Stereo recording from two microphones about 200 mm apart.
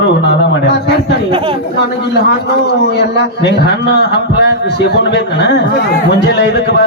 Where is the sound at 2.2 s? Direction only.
55° left (ahead or behind).